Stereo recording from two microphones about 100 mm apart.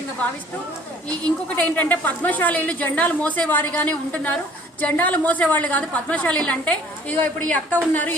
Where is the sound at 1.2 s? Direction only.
15° left (ahead or behind).